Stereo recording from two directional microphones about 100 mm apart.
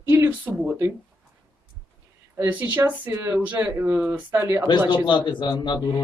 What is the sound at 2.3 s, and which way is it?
Speech, 20° right (ahead or behind).